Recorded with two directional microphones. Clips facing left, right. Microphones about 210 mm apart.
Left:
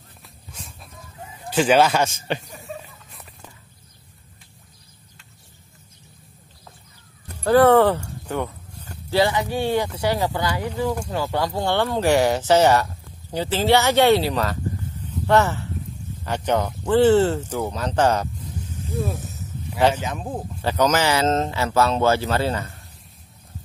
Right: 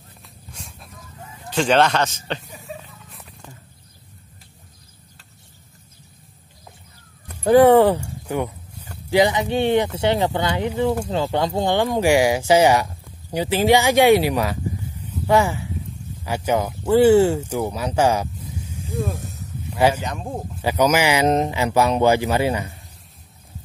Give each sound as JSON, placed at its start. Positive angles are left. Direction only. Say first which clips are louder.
{"t": 0.5, "sound": "a sound", "louder": "even", "side_deg": 0}
{"t": 1.5, "sound": "a man's voice", "louder": "left 1 dB", "side_deg": 5}
{"t": 2.8, "sound": "a sound", "louder": "right 1 dB", "side_deg": 0}
{"t": 7.4, "sound": "speech", "louder": "right 2 dB", "side_deg": -15}
{"t": 18.9, "sound": "snake", "louder": "right 1 dB", "side_deg": 0}
{"t": 20.0, "sound": "speech", "louder": "even", "side_deg": 0}
{"t": 20.6, "sound": "speech", "louder": "right 2 dB", "side_deg": -10}